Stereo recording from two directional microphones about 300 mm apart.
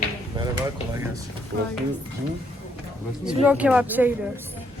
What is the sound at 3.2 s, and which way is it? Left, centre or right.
Speech, centre.